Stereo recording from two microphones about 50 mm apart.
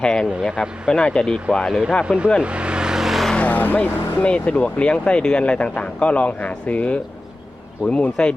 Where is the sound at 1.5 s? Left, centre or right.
Centre.